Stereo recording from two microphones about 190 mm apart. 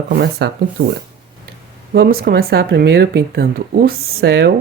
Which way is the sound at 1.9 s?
55° right (ahead or behind).